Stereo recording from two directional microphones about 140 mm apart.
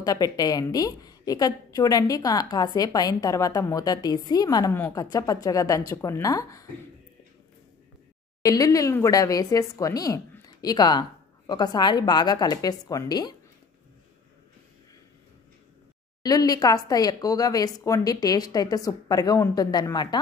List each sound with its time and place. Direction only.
0.0 s speech: 25° left (ahead or behind)
4.7 s a woman's voice: 15° left (ahead or behind)
5.1 s speech: 25° left (ahead or behind)
8.4 s speech: 25° left (ahead or behind)
16.2 s speech: 30° left (ahead or behind)